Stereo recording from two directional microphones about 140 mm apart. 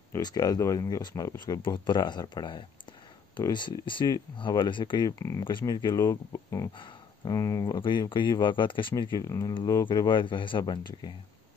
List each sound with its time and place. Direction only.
0.1 s speech: 25° left (ahead or behind)